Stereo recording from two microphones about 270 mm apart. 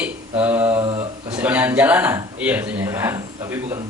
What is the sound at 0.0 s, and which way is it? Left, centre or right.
Mantra, centre.